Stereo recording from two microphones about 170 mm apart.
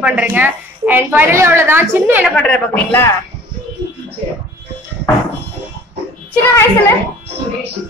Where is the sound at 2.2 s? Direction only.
5° left (ahead or behind).